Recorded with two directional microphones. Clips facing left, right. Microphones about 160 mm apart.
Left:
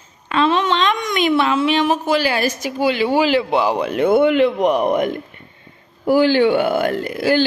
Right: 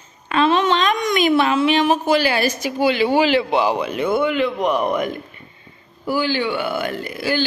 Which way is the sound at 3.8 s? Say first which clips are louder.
Left 5 dB; 55° left (ahead or behind).